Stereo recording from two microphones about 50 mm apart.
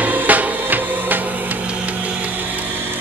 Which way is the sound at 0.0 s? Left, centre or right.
Right.